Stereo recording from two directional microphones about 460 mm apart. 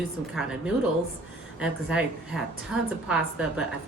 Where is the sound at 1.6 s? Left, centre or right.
Centre.